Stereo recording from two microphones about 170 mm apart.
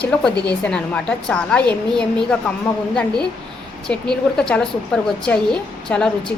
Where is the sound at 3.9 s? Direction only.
5° left (ahead or behind).